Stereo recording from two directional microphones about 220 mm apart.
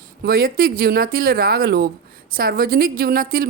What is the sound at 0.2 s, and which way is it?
Speech, 45° right (ahead or behind).